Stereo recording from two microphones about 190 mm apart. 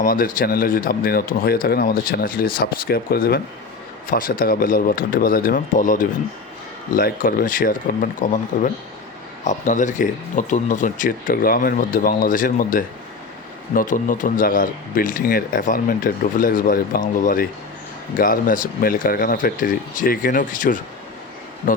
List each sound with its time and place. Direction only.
0.0 s speech: 45° left (ahead or behind)